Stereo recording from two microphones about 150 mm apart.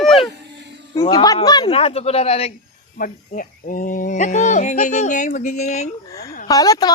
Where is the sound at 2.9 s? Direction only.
65° left (ahead or behind); by 5.8 s 50° left (ahead or behind).